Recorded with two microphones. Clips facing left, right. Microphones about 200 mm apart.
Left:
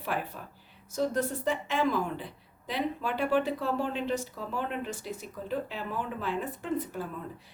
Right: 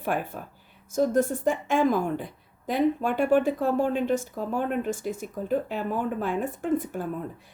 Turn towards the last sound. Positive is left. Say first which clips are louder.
# right 6 dB
turn(degrees=-50)  # may be behind; listen again after turning